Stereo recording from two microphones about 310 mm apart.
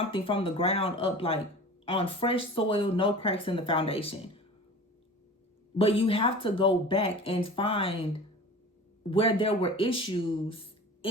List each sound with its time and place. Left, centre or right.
0.0 s speech: centre
5.7 s speech: centre